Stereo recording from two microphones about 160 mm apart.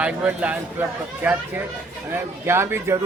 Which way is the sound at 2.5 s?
15° right (ahead or behind).